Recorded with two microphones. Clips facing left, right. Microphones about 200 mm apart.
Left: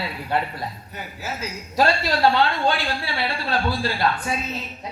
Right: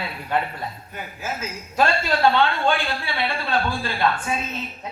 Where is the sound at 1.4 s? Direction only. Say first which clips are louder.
Left 1 dB; 35° left (ahead or behind).